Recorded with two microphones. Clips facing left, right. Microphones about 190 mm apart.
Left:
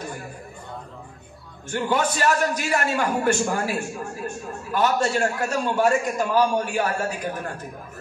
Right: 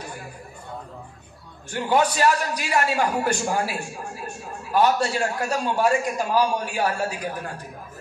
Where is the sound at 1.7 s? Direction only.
45° left (ahead or behind).